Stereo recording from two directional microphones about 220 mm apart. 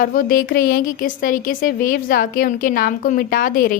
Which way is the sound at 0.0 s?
40° left (ahead or behind).